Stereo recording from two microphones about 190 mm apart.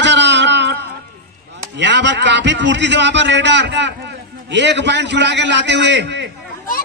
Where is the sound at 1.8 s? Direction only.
65° right (ahead or behind).